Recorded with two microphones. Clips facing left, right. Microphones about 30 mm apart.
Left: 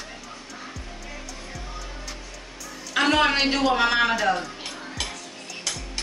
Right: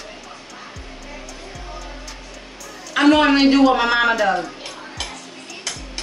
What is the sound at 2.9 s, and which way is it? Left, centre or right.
A man's voice, centre.